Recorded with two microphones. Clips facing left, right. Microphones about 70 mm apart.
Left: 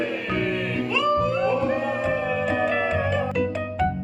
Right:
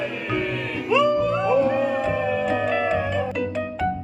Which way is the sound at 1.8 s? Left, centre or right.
Centre.